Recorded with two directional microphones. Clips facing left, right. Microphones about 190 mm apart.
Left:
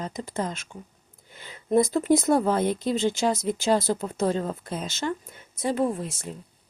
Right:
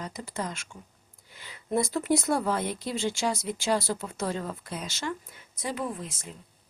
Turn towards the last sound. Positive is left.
turn(degrees=30)  # may be behind; listen again after turning